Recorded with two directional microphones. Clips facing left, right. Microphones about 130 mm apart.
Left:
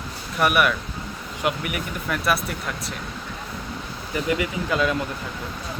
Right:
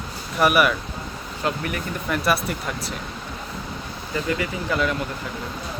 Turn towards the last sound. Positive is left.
turn(degrees=20)  # may be behind; listen again after turning